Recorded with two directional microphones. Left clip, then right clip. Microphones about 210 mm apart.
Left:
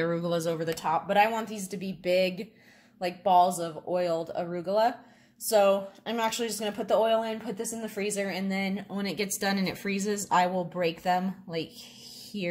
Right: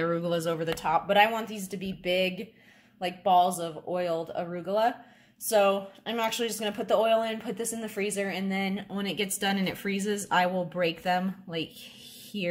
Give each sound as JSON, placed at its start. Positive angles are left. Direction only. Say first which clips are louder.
{"t": 0.0, "sound": "speech", "louder": "even", "side_deg": 0}
{"t": 12.3, "sound": "speech", "louder": "right 2 dB", "side_deg": 25}